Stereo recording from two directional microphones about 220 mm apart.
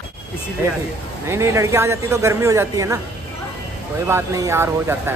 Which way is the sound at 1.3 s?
10° right (ahead or behind).